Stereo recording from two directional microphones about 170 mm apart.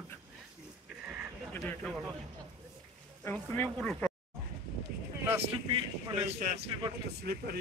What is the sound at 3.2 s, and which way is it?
Speech, 10° left (ahead or behind).